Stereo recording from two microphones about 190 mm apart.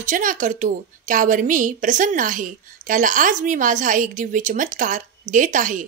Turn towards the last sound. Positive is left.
turn(degrees=-45)  # may be behind; listen again after turning